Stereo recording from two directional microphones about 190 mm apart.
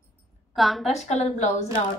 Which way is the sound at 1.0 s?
35° left (ahead or behind).